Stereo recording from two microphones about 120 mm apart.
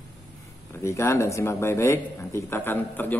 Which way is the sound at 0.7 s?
25° left (ahead or behind).